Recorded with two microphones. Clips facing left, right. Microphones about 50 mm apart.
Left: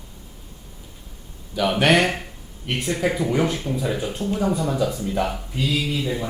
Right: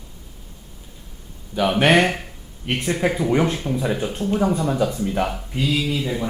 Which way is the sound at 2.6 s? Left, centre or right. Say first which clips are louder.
Right 2 dB; right.